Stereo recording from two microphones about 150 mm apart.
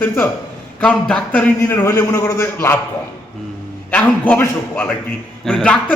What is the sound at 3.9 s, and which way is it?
A man's voice, 10° left (ahead or behind).